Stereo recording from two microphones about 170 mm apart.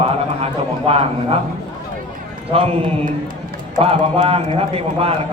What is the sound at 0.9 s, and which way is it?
Speech, 35° right (ahead or behind).